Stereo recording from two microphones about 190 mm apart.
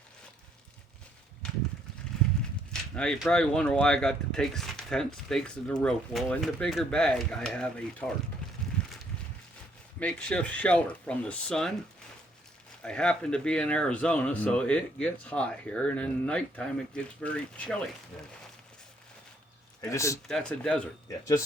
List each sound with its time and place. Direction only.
2.9 s speech: 5° left (ahead or behind)
10.0 s speech: 5° left (ahead or behind)
12.8 s speech: 5° left (ahead or behind)
19.8 s speech: 15° left (ahead or behind)
20.2 s speech: 5° left (ahead or behind)
21.1 s speech: 15° left (ahead or behind)